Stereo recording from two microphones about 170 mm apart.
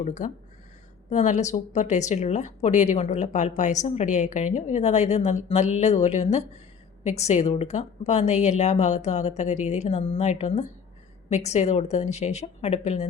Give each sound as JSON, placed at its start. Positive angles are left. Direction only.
{"t": 0.0, "sound": "speech", "side_deg": 45}